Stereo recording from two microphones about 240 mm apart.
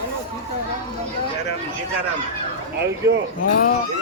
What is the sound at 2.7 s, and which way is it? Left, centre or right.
Speech, right.